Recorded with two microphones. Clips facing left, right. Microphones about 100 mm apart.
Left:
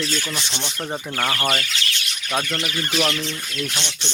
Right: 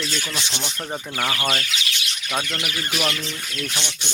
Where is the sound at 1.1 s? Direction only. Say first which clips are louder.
Left 1 dB; 5° right (ahead or behind).